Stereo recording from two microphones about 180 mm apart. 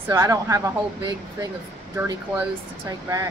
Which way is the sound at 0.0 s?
15° right (ahead or behind).